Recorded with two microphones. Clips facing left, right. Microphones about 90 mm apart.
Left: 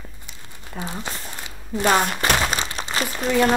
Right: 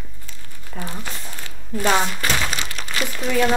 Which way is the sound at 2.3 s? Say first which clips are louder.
Left 3 dB; 30° left (ahead or behind).